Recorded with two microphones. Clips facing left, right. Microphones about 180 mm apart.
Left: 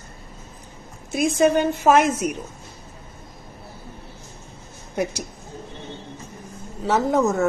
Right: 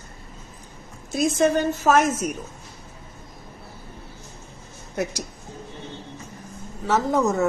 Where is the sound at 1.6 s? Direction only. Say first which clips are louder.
Left 2 dB; 10° left (ahead or behind).